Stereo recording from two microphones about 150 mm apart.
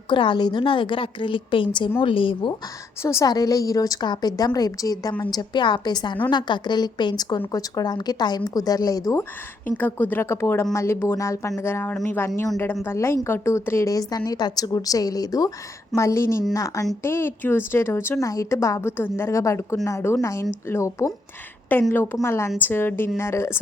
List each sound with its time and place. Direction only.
0.1 s a woman's voice: 30° left (ahead or behind)
3.0 s a woman's voice: 20° left (ahead or behind)
9.6 s a woman's voice: 10° left (ahead or behind)